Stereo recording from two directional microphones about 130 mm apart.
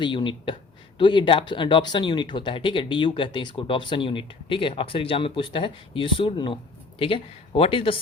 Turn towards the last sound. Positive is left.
turn(degrees=45)  # may be behind; listen again after turning